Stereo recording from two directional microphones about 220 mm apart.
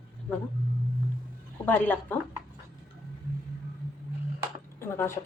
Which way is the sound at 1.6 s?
10° left (ahead or behind).